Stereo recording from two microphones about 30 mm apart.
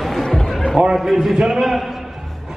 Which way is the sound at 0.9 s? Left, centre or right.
Centre.